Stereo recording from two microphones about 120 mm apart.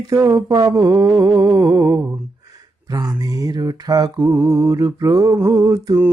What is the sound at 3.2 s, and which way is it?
Mantra, 30° right (ahead or behind).